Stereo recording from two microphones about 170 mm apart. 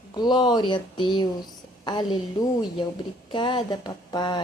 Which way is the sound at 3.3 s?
25° left (ahead or behind).